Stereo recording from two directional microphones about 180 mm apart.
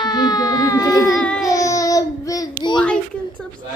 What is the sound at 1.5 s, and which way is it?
Babbling, 20° left (ahead or behind).